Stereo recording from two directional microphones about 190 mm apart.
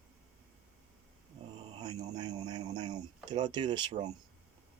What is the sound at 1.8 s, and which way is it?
Speech, 20° right (ahead or behind).